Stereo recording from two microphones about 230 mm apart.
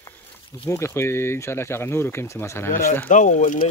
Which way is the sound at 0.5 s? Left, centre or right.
Centre.